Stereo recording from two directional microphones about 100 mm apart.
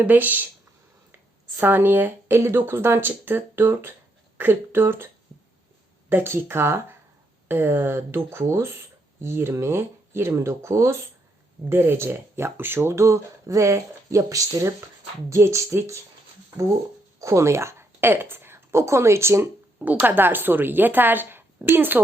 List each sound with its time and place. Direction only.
0.0 s speech: 20° right (ahead or behind)
6.1 s speech: 20° right (ahead or behind)
17.2 s a woman's voice: 30° right (ahead or behind)